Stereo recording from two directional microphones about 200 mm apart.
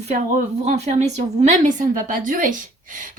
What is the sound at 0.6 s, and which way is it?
A woman's voice, 35° right (ahead or behind).